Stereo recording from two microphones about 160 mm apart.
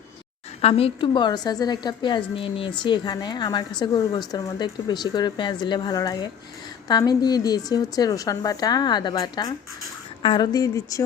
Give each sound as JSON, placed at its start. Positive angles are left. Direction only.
{"t": 0.6, "sound": "a woman's voice", "side_deg": 35}